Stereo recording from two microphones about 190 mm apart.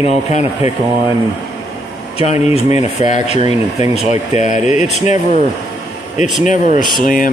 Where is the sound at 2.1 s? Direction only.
35° left (ahead or behind).